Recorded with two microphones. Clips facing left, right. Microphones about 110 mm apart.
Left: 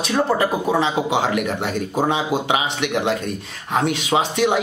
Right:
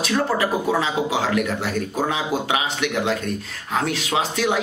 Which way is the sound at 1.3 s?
20° left (ahead or behind).